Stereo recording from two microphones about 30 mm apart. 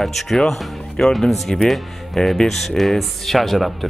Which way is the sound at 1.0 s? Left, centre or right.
Left.